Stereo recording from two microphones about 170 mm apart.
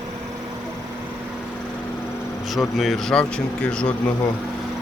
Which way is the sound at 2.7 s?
Centre (ahead or behind).